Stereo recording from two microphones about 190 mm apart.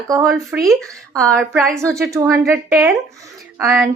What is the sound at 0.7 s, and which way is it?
A woman's voice, centre (ahead or behind).